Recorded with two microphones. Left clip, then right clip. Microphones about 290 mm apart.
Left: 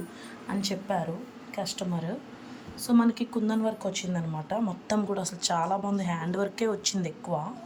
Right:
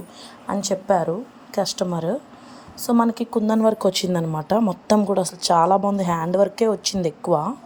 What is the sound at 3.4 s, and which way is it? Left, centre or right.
Speech, centre.